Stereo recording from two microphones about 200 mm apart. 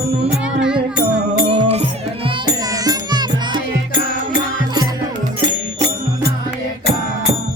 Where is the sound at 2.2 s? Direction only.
20° right (ahead or behind).